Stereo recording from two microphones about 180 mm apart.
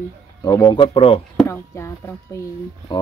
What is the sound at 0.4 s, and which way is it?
Speech, 20° left (ahead or behind).